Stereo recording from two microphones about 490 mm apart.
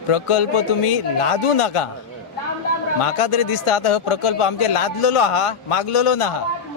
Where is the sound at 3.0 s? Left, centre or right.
Left.